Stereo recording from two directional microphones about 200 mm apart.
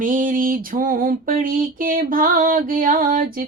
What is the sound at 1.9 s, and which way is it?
Music, 45° right (ahead or behind).